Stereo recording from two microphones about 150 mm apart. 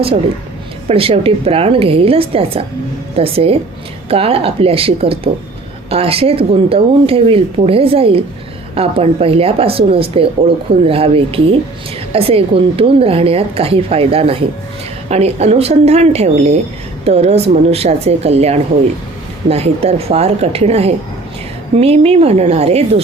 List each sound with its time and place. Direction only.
0.9 s speech: 40° right (ahead or behind)